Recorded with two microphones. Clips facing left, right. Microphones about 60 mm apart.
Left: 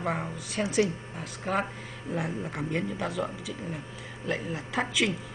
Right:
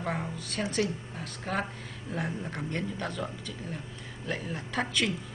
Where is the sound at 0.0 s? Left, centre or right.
Centre.